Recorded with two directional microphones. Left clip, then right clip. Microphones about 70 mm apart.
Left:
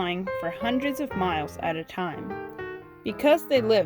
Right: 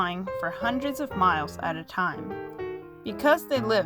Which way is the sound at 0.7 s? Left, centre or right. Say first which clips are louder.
Left 2 dB; right.